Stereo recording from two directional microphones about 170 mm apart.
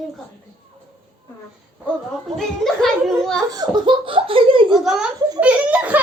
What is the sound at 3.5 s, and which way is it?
Laughter, 25° right (ahead or behind).